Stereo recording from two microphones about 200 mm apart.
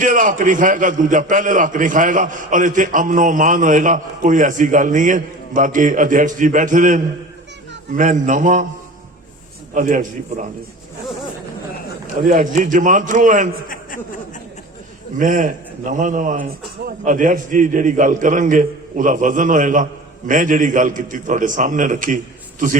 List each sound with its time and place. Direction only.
0.0 s a man's voice: 40° right (ahead or behind)
9.7 s a man's voice: 40° right (ahead or behind)
12.3 s a man's voice: 40° right (ahead or behind)
13.7 s a sound: 45° left (ahead or behind)
15.2 s a man's voice: 40° right (ahead or behind)